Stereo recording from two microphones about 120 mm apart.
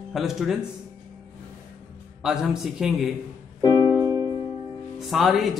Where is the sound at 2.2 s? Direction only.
5° right (ahead or behind).